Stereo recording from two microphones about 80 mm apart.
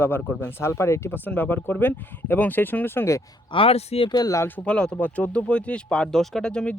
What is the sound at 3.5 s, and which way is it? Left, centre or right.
Speech, left.